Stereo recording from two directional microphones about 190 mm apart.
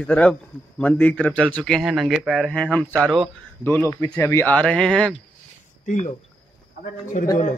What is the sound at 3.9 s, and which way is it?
Speech, 10° left (ahead or behind).